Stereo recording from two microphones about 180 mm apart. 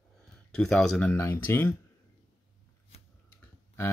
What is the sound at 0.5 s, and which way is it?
Speech, 5° left (ahead or behind).